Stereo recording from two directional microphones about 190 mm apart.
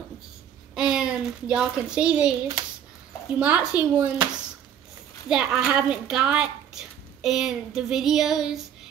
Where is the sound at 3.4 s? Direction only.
5° right (ahead or behind).